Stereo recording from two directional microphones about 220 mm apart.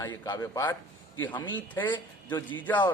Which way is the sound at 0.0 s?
15° left (ahead or behind).